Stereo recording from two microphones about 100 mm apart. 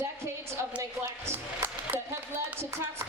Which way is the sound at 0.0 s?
25° right (ahead or behind).